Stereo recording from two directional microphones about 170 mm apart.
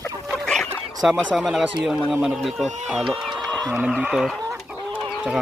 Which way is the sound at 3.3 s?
Centre (ahead or behind).